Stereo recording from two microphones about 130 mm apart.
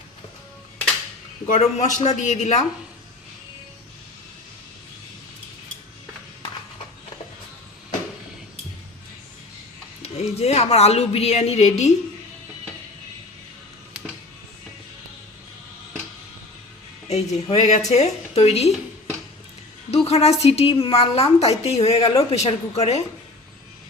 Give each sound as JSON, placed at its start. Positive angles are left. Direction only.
{"t": 1.5, "sound": "a woman's voice", "side_deg": 65}
{"t": 10.0, "sound": "a woman's voice", "side_deg": 55}
{"t": 17.1, "sound": "a woman's voice", "side_deg": 55}
{"t": 19.9, "sound": "a woman's voice", "side_deg": 55}